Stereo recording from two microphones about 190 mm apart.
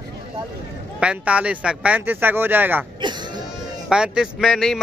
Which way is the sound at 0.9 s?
5° right (ahead or behind).